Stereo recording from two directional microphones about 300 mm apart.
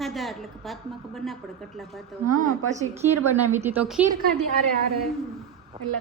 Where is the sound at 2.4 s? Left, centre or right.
Right.